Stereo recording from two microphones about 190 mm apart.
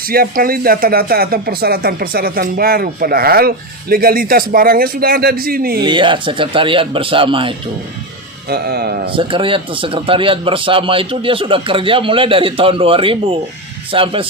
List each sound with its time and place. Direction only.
0.1 s speech: 50° right (ahead or behind)
5.8 s a man's voice: 25° right (ahead or behind)
8.4 s speech: 55° right (ahead or behind)
9.1 s a man's voice: 25° right (ahead or behind)